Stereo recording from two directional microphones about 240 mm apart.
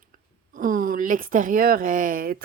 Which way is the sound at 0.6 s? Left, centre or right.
Right.